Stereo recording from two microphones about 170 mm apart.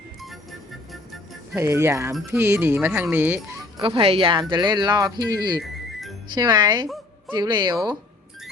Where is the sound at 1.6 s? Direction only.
15° right (ahead or behind).